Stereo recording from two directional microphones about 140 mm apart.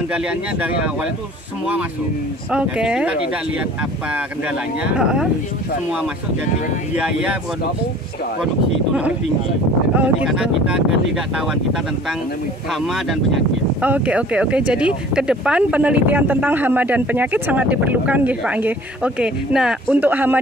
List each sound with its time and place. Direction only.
0.1 s speech: 10° right (ahead or behind)
2.5 s speech: 5° right (ahead or behind)
7.0 s speech: 10° right (ahead or behind)
9.9 s speech: 5° right (ahead or behind)
12.8 s speech: centre (ahead or behind)